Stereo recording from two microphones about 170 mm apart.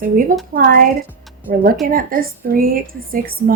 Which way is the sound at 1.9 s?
55° right (ahead or behind).